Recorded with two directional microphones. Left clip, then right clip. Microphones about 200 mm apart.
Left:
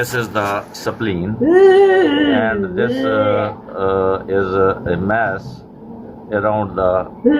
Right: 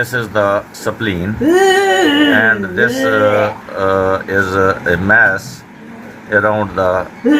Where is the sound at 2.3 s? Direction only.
70° right (ahead or behind); by 6.9 s 90° right.